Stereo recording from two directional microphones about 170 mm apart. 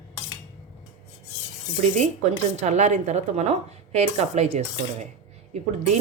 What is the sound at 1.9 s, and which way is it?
Speech, 45° right (ahead or behind).